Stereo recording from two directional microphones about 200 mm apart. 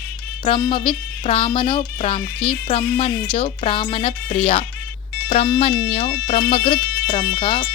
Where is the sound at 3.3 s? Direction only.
30° left (ahead or behind).